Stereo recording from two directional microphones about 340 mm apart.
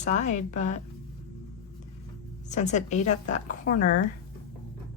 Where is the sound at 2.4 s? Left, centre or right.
Left.